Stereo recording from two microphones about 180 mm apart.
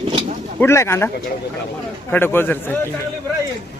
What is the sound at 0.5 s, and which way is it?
Speech, 15° left (ahead or behind).